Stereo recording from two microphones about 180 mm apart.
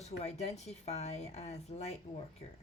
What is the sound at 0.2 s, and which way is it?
Speech, 40° left (ahead or behind).